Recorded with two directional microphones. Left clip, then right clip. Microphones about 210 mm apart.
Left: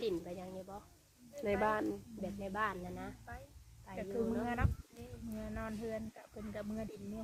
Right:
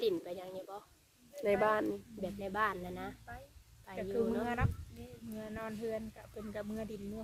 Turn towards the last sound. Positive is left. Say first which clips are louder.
# right 2 dB
turn(degrees=-50)  # may be behind; listen again after turning